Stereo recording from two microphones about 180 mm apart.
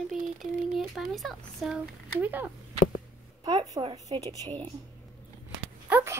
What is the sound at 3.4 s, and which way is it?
Speech, 25° right (ahead or behind).